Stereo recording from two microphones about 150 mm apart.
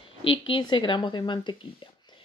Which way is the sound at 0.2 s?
35° left (ahead or behind).